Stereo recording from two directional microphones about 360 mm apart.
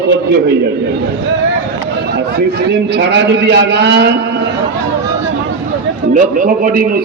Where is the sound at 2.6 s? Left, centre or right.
Right.